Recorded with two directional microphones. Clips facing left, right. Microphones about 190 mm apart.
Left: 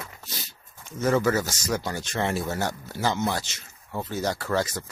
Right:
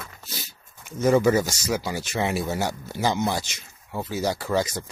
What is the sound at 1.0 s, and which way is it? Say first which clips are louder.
Speech: right 4 dB; 15° right (ahead or behind).